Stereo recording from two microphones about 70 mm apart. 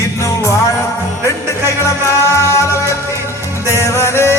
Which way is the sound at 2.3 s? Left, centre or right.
Left.